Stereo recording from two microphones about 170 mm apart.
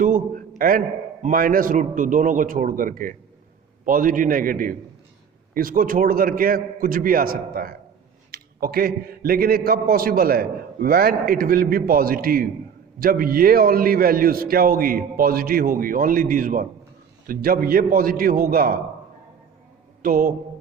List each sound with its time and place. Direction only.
0.0 s a sound: 55° right (ahead or behind)
1.2 s a man's voice: 55° right (ahead or behind)
20.0 s a man's voice: 55° right (ahead or behind)